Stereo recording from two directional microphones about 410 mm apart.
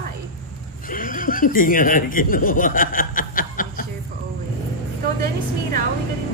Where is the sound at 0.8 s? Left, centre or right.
Centre.